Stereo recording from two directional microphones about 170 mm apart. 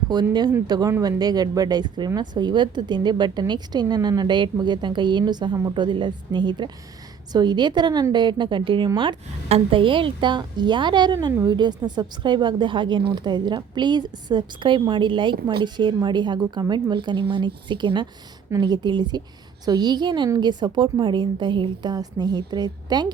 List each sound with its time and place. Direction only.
0.1 s speech: 25° right (ahead or behind)